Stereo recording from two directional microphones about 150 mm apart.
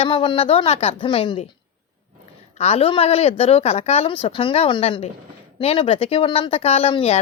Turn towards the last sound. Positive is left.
turn(degrees=40)  # may be behind; listen again after turning